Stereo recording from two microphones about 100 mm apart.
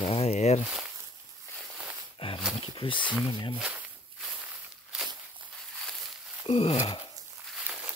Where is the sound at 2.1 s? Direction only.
65° left (ahead or behind).